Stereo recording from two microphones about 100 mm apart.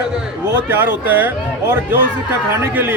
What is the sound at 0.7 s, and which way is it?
A man's voice, 20° right (ahead or behind).